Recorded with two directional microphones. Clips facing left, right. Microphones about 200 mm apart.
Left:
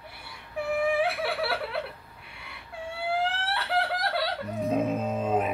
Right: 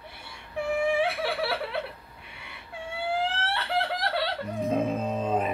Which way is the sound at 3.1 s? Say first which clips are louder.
Even; centre (ahead or behind).